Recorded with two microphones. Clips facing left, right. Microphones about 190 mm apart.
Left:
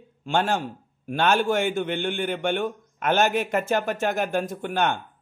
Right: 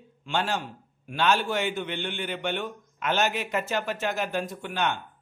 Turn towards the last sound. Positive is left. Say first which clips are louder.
# left 4 dB
turn(degrees=50)  # may be behind; listen again after turning